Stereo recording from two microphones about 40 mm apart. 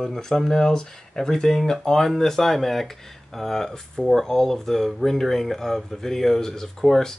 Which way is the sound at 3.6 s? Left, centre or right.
Centre.